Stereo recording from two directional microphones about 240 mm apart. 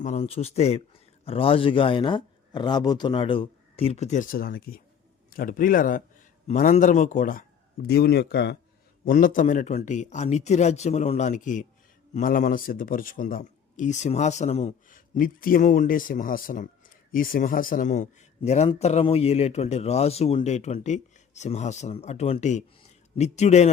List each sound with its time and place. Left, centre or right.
0.0 s a man's voice: left